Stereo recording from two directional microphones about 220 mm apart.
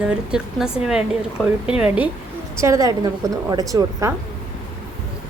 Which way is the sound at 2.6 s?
15° right (ahead or behind).